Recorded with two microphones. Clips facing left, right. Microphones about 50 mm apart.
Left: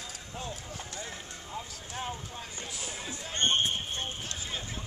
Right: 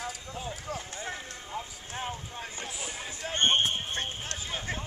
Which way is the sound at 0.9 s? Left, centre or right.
Right.